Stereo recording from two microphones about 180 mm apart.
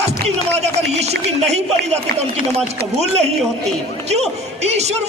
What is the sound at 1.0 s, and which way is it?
Speech, 35° right (ahead or behind).